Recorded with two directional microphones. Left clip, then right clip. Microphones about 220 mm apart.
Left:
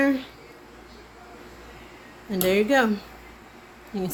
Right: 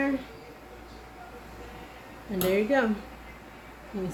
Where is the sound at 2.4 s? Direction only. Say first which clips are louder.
Left 4 dB; 50° left (ahead or behind).